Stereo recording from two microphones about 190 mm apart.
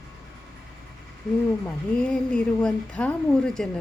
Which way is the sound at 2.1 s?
5° left (ahead or behind).